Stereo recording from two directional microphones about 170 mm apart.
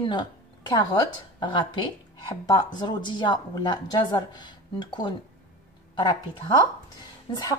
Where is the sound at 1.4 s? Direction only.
30° left (ahead or behind).